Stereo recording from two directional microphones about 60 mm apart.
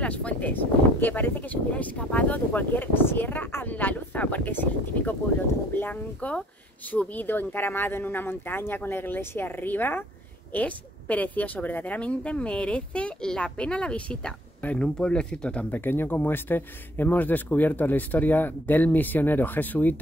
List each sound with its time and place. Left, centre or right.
0.0 s speech: left
15.7 s speech: left